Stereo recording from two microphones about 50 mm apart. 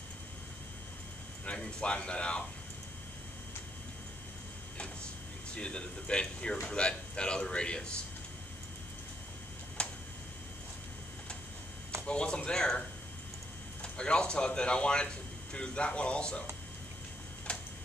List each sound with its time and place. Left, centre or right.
1.4 s a man's voice: left
5.5 s a man's voice: left
9.8 s tick-tock: left
12.1 s a man's voice: left
13.9 s a man's voice: centre
17.5 s tick-tock: left